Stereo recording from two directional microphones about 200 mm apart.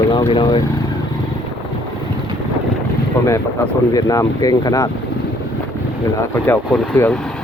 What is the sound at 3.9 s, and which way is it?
Speech, 20° left (ahead or behind).